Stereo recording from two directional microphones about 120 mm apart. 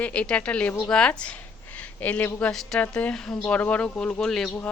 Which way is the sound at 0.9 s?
10° left (ahead or behind).